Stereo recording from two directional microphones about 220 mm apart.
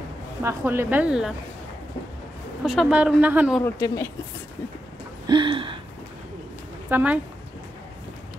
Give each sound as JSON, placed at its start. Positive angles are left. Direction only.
{"t": 0.4, "sound": "a woman's voice", "side_deg": -10}
{"t": 2.6, "sound": "a woman's voice", "side_deg": -5}
{"t": 3.6, "sound": "speech", "side_deg": 15}
{"t": 5.2, "sound": "a sound", "side_deg": -20}
{"t": 6.9, "sound": "speech", "side_deg": -5}